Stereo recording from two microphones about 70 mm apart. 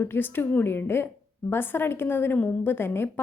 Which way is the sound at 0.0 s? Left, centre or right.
Left.